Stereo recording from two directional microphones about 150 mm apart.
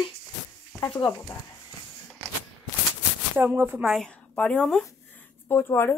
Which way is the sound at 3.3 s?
15° right (ahead or behind).